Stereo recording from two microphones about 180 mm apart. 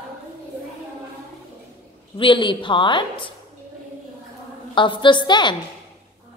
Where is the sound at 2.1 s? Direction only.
25° left (ahead or behind).